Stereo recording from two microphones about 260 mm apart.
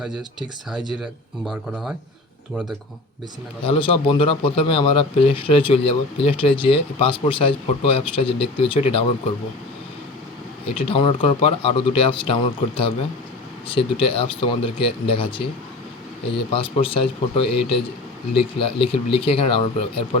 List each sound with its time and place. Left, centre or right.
0.0 s speech: centre
1.5 s speech: centre
3.6 s a man's voice: left
10.8 s a man's voice: left
16.5 s a man's voice: left